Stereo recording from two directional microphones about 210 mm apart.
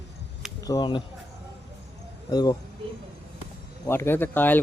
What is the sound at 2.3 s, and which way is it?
Speech, 20° left (ahead or behind).